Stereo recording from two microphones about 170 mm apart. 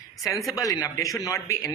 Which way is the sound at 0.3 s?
Centre (ahead or behind).